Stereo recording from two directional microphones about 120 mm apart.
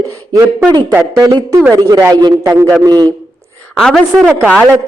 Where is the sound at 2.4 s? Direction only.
25° right (ahead or behind).